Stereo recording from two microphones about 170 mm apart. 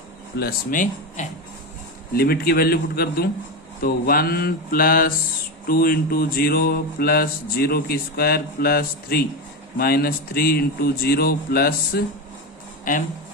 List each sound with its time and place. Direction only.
0.3 s speech: 60° left (ahead or behind)
2.1 s mantra: 65° left (ahead or behind)
12.9 s speech: 50° left (ahead or behind)